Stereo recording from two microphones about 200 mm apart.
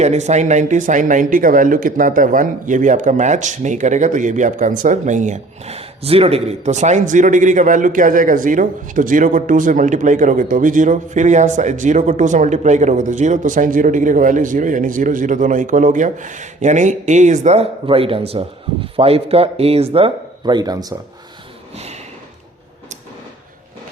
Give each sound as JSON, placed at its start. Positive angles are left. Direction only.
{"t": 0.0, "sound": "speech", "side_deg": -35}